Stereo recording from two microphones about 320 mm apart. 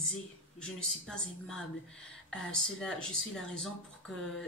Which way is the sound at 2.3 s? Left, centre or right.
Centre.